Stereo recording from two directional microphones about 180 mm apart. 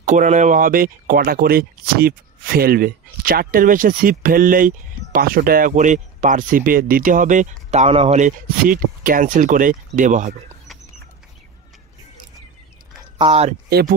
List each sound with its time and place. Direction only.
0.0 s speech: 45° right (ahead or behind)
13.2 s speech: 35° right (ahead or behind)
13.7 s speech: 60° right (ahead or behind)